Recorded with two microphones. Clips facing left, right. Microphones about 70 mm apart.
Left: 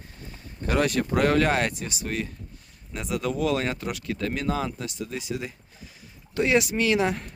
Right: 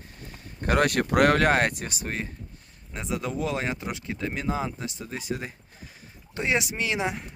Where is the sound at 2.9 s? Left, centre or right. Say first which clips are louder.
Left 2 dB; right.